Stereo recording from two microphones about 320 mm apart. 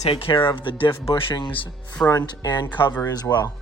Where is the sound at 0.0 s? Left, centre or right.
Centre.